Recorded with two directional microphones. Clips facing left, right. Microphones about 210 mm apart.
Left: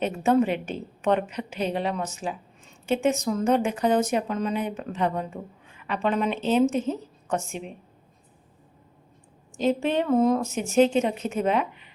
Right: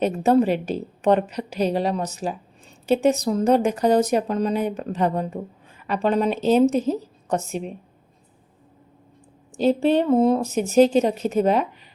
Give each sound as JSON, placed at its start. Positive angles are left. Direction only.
{"t": 0.0, "sound": "a woman's voice", "side_deg": -35}
{"t": 9.6, "sound": "a woman's voice", "side_deg": -35}